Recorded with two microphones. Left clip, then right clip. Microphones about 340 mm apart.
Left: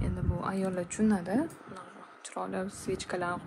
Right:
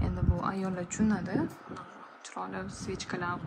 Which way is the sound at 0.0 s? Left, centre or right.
Centre.